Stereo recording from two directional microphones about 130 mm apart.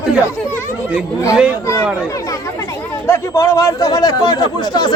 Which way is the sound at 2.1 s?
25° left (ahead or behind).